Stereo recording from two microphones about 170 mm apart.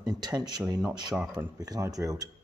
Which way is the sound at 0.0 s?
25° right (ahead or behind).